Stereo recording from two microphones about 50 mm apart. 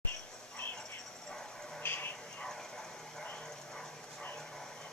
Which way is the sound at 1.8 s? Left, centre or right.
Left.